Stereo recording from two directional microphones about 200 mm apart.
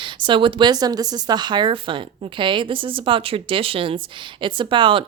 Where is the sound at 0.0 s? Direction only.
25° right (ahead or behind).